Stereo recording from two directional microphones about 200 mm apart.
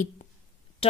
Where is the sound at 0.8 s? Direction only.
25° left (ahead or behind).